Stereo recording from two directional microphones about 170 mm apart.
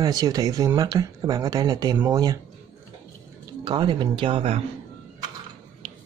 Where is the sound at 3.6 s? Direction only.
30° right (ahead or behind).